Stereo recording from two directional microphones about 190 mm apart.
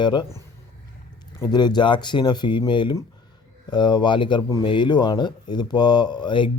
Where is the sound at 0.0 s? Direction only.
25° left (ahead or behind).